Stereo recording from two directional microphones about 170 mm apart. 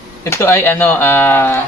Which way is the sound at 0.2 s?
15° left (ahead or behind).